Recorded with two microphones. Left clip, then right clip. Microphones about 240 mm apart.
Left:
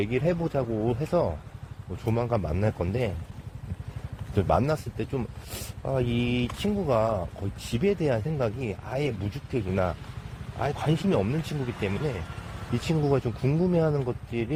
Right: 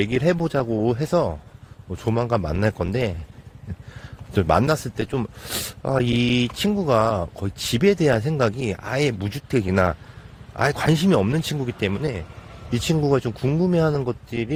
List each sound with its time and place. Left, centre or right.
0.0 s speech: right
4.4 s speech: right